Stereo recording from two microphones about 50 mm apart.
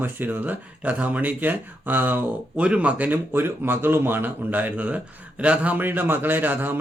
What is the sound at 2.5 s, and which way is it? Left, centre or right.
Speech, right.